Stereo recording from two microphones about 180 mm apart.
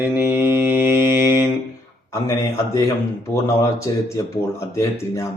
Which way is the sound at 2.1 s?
15° left (ahead or behind).